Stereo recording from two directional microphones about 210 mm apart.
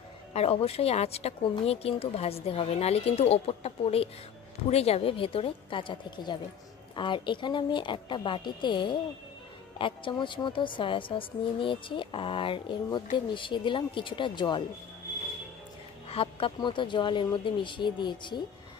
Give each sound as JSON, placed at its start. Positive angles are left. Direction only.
{"t": 0.3, "sound": "speech", "side_deg": 30}
{"t": 16.1, "sound": "speech", "side_deg": 25}